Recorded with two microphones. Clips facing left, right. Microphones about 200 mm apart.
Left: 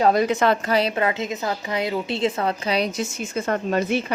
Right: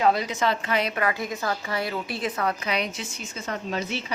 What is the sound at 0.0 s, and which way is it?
Speech, 50° left (ahead or behind).